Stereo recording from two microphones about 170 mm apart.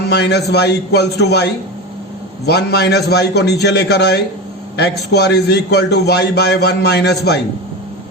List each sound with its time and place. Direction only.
0.1 s a man's voice: 80° left
2.5 s a man's voice: 75° left (ahead or behind)